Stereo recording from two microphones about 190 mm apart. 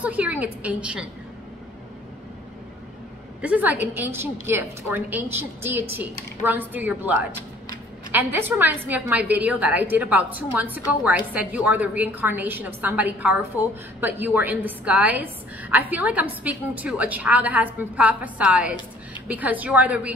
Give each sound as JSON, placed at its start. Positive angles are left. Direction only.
{"t": 0.0, "sound": "a woman's voice", "side_deg": -10}
{"t": 3.3, "sound": "a woman's voice", "side_deg": -10}